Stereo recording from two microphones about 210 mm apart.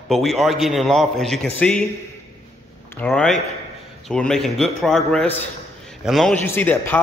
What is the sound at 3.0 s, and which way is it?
A man's voice, 5° left (ahead or behind).